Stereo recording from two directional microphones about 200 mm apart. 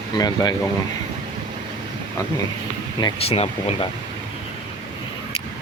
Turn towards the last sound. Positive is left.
turn(degrees=30)  # may be behind; listen again after turning